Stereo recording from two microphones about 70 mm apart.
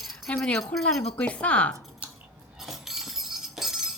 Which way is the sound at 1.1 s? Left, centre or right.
Centre.